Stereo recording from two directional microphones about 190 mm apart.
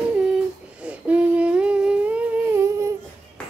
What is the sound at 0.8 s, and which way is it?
Humming, 5° right (ahead or behind).